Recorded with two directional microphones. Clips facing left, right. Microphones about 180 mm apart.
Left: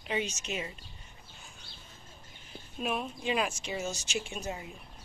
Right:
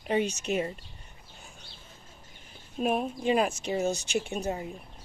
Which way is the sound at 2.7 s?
45° right (ahead or behind).